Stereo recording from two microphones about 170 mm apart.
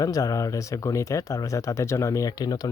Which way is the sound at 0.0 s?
20° left (ahead or behind).